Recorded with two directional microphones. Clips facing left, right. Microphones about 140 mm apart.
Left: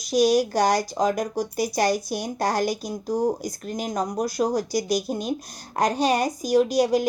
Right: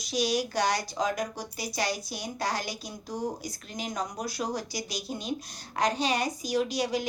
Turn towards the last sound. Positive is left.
turn(degrees=45)  # may be behind; listen again after turning